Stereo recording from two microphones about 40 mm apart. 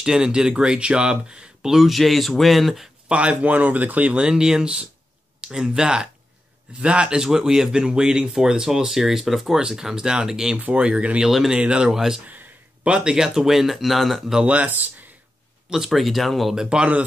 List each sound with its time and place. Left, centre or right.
0.0 s speech: centre
1.7 s speech: centre
3.1 s speech: right
4.1 s speech: right
11.2 s speech: centre
11.5 s speech: right
11.9 s speech: centre
12.8 s speech: right
13.1 s speech: centre
14.4 s speech: right
15.7 s speech: centre
16.5 s speech: right